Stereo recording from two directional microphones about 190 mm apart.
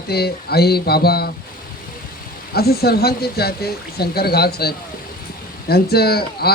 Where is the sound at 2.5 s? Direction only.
55° left (ahead or behind).